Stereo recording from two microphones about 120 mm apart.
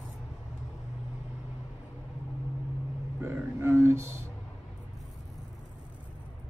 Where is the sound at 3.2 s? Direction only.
20° right (ahead or behind).